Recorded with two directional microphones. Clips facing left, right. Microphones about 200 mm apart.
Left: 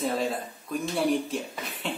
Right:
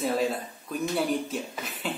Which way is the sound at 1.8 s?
5° right (ahead or behind).